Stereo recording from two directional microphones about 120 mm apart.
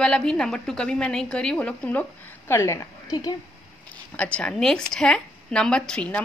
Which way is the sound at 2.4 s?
25° left (ahead or behind).